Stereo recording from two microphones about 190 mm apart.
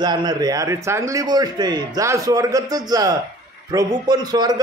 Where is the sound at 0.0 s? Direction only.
20° right (ahead or behind).